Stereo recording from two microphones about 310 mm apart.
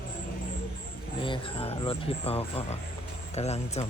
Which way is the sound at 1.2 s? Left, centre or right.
Centre.